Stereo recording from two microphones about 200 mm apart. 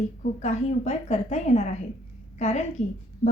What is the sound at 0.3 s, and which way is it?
A woman's voice, 35° left (ahead or behind).